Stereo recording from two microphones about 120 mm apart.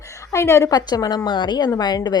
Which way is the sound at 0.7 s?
35° left (ahead or behind).